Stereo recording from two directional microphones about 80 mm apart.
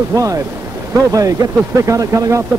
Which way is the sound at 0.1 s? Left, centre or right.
Right.